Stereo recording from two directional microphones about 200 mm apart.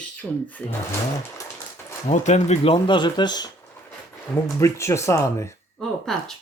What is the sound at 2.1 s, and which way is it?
Speech, 35° left (ahead or behind).